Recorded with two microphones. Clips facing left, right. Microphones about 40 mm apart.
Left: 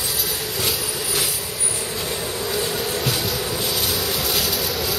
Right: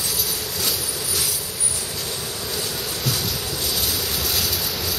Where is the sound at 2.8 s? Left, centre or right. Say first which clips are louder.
Left 3 dB; left.